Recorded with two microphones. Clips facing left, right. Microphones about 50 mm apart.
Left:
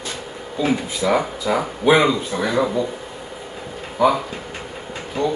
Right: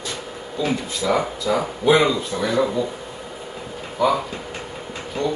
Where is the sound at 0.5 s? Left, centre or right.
Left.